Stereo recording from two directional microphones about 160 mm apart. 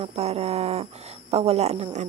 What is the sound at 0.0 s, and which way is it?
Speech, 40° right (ahead or behind).